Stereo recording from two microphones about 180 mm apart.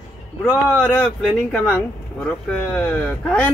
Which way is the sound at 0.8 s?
10° left (ahead or behind).